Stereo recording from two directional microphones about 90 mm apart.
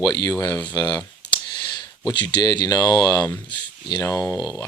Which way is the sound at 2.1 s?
55° left (ahead or behind).